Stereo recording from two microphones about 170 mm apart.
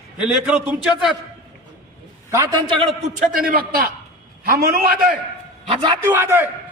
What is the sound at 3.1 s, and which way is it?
A man's voice, 55° right (ahead or behind).